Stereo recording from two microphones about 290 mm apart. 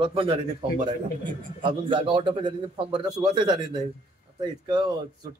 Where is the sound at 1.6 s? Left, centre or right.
Centre.